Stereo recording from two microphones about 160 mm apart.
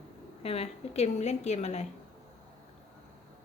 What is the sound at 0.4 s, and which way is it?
A woman's voice, 40° left (ahead or behind).